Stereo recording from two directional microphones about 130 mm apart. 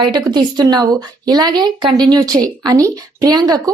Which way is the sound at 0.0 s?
35° right (ahead or behind).